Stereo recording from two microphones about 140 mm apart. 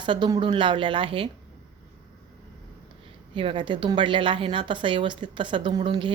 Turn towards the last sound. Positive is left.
turn(degrees=-35)  # may be behind; listen again after turning